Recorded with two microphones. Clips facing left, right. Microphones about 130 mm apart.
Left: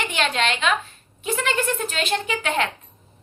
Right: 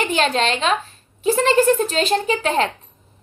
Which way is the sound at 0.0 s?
35° right (ahead or behind).